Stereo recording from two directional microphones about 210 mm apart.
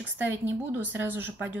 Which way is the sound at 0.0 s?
10° right (ahead or behind).